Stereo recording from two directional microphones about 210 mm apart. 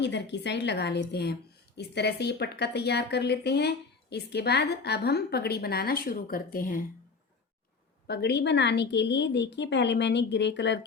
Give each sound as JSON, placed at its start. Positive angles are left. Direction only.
{"t": 0.0, "sound": "a woman's voice", "side_deg": 55}
{"t": 8.0, "sound": "a woman's voice", "side_deg": 50}